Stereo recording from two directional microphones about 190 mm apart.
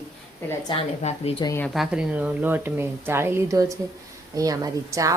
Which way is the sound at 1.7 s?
5° right (ahead or behind).